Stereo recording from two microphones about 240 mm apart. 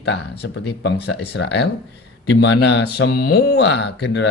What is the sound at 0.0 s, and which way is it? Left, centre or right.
Speech, left.